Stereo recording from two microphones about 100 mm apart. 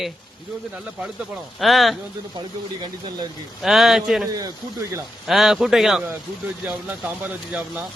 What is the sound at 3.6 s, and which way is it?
Speech, centre (ahead or behind).